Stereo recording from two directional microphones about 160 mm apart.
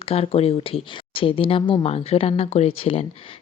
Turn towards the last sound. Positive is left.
turn(degrees=35)  # may be behind; listen again after turning